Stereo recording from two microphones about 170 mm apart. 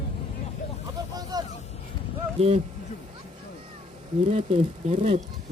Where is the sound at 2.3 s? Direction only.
35° right (ahead or behind).